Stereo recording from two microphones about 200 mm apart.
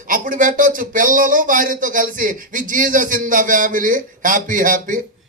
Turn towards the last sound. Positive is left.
turn(degrees=-40)  # may be behind; listen again after turning